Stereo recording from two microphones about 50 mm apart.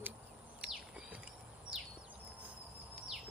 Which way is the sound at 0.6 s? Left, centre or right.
Centre.